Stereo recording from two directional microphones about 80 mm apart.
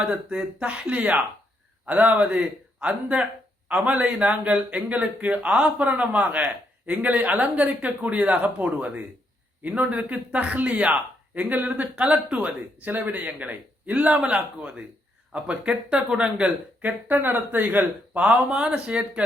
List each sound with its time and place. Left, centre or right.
0.0 s speech: centre